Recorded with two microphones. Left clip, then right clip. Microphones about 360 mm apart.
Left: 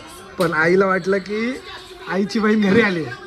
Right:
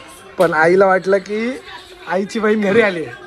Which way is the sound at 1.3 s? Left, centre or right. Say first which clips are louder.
Right 2 dB; right.